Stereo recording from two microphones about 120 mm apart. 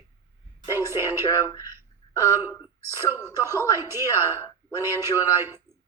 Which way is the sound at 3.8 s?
20° right (ahead or behind).